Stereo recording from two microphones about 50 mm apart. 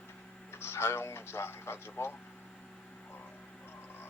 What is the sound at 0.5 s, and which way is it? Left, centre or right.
Speech, left.